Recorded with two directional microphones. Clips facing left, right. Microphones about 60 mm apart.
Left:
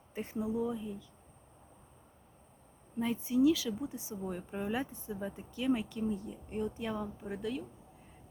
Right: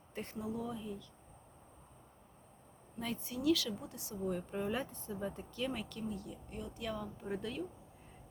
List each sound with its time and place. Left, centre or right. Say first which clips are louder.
0.1 s speech: left 5 dB; centre
3.0 s speech: left 9 dB; centre
7.3 s speech: left 2 dB; centre